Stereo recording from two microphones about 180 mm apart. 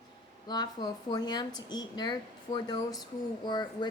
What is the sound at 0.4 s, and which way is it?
Speech, 25° left (ahead or behind).